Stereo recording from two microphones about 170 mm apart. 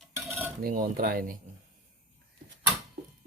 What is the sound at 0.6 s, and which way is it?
Speech, 55° right (ahead or behind).